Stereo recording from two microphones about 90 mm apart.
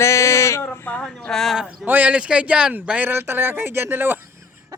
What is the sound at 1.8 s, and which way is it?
Speech, 15° right (ahead or behind).